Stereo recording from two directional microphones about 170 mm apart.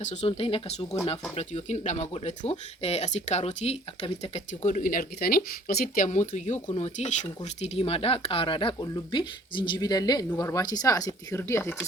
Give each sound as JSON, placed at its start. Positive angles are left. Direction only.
{"t": 0.0, "sound": "speech", "side_deg": 40}